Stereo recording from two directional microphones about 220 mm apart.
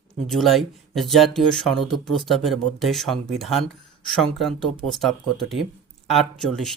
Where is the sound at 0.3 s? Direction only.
Centre (ahead or behind).